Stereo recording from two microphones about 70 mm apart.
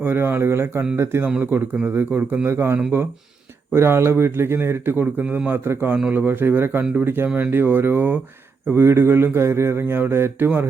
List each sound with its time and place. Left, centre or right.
0.0 s speech: right
1.4 s speech: right
3.8 s speech: right